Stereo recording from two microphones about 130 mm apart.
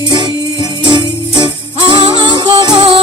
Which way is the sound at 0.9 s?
35° right (ahead or behind).